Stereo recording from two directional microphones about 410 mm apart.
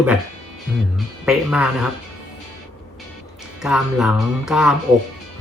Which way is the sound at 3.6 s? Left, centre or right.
Centre.